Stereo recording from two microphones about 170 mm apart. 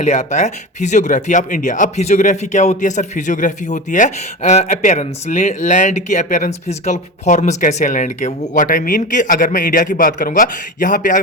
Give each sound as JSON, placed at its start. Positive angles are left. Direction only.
{"t": 0.0, "sound": "speech", "side_deg": 40}